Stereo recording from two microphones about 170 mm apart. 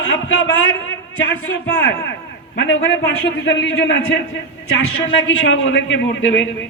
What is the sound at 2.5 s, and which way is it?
A man's voice, 85° left.